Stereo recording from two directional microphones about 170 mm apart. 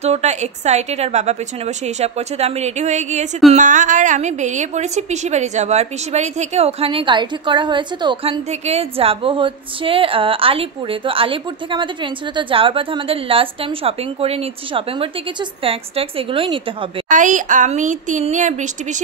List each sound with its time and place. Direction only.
0.0 s a woman's voice: 40° right (ahead or behind)
17.1 s a woman's voice: 50° right (ahead or behind)